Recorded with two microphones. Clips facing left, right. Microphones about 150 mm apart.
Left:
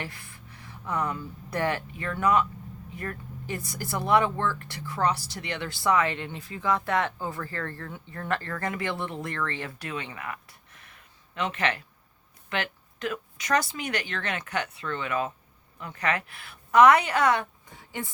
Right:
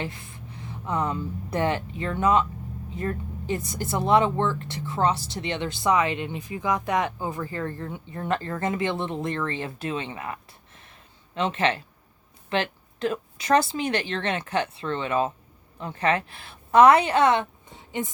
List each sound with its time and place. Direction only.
0.0 s a woman's voice: 20° right (ahead or behind)